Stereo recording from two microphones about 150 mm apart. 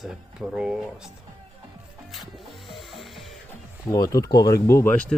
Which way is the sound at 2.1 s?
Centre (ahead or behind).